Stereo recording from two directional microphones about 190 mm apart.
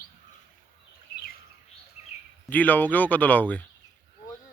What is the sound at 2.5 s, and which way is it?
Speech, 10° left (ahead or behind).